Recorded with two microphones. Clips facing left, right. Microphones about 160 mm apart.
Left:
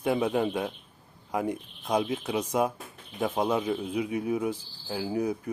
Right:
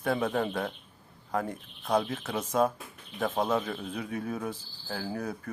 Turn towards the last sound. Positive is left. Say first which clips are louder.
# left 5 dB
turn(degrees=15)  # may be behind; listen again after turning